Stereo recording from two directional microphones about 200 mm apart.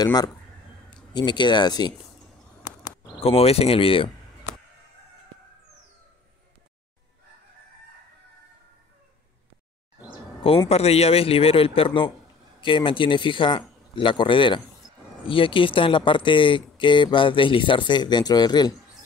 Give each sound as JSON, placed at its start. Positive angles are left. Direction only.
{"t": 0.0, "sound": "speech", "side_deg": 20}
{"t": 3.2, "sound": "speech", "side_deg": 30}
{"t": 10.4, "sound": "speech", "side_deg": 30}